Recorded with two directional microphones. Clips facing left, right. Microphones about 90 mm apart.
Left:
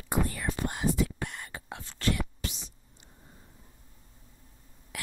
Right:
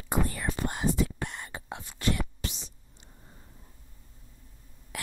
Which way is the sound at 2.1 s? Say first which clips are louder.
Even; 30° right (ahead or behind).